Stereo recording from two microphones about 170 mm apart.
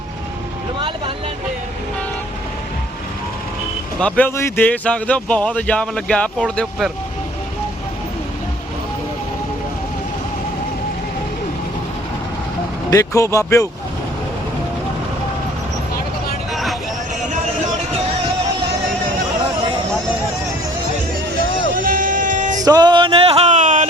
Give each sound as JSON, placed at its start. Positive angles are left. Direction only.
{"t": 0.8, "sound": "speech", "side_deg": -30}
{"t": 4.0, "sound": "speech", "side_deg": 10}
{"t": 12.9, "sound": "speech", "side_deg": 20}
{"t": 16.5, "sound": "vehicle", "side_deg": 0}
{"t": 21.8, "sound": "music", "side_deg": -50}
{"t": 22.6, "sound": "music", "side_deg": -25}